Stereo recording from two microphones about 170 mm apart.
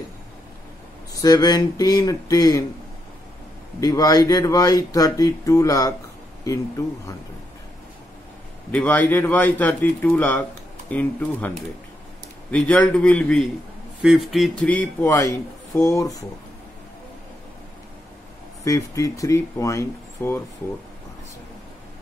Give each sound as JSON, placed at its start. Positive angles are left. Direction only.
{"t": 1.2, "sound": "speech", "side_deg": 20}
{"t": 3.8, "sound": "speech", "side_deg": 20}
{"t": 8.7, "sound": "speech", "side_deg": 10}
{"t": 18.6, "sound": "speech", "side_deg": 20}